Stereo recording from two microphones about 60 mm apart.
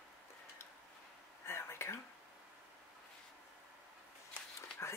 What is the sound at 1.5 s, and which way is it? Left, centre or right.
Whispering, left.